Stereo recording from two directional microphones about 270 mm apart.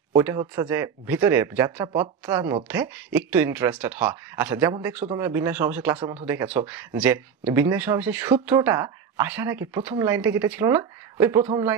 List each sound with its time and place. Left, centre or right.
0.1 s speech: centre